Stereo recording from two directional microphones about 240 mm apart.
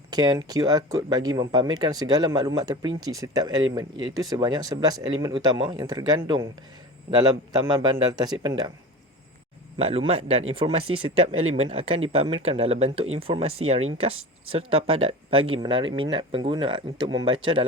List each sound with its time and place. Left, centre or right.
0.1 s speech: centre
9.7 s speech: right